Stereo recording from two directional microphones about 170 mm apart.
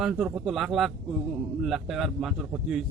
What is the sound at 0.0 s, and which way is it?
A man's voice, 5° right (ahead or behind).